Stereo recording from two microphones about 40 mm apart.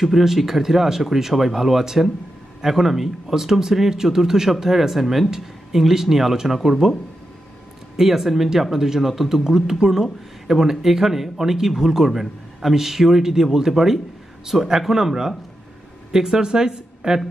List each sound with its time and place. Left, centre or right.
0.0 s speech: centre
8.0 s speech: centre